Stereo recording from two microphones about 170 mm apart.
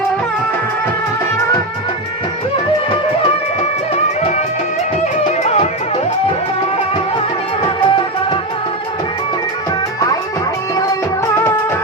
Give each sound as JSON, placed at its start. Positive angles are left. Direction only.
{"t": 3.2, "sound": "music", "side_deg": 35}
{"t": 7.8, "sound": "music", "side_deg": 30}